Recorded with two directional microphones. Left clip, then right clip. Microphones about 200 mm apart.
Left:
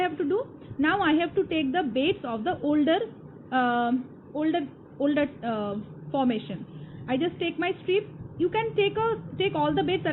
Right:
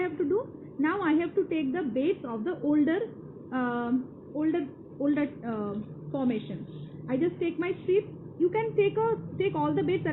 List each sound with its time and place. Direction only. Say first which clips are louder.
0.8 s a woman's voice: left 4 dB; 55° left (ahead or behind)